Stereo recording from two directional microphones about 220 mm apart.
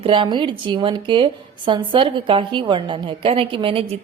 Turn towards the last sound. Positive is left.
turn(degrees=-25)  # may be behind; listen again after turning